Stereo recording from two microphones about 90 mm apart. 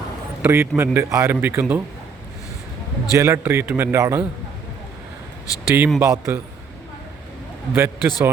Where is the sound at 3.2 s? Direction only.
30° right (ahead or behind).